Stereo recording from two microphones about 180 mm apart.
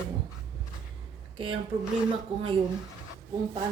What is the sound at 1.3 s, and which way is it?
Speech, 30° right (ahead or behind).